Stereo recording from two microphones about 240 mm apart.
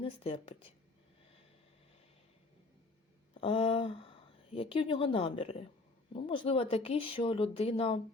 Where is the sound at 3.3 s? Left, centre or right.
Left.